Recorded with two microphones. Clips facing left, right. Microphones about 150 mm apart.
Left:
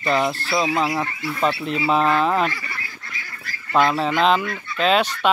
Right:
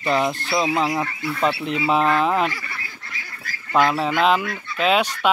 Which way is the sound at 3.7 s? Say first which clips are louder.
Even; 10° right (ahead or behind).